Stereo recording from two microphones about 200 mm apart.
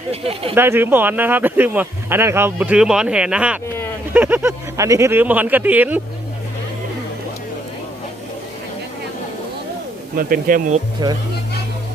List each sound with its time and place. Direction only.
0.1 s speech: 30° right (ahead or behind)
0.5 s speech: 10° right (ahead or behind)
10.2 s speech: 45° right (ahead or behind)
11.0 s speech: 20° right (ahead or behind)